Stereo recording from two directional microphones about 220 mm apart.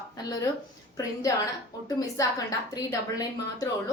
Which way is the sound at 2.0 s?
15° left (ahead or behind).